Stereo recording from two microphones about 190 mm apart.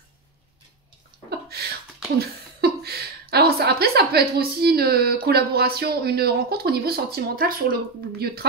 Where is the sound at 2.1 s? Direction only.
55° right (ahead or behind).